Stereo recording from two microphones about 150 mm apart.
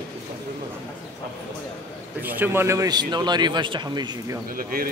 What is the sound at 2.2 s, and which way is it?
Speech, 10° right (ahead or behind).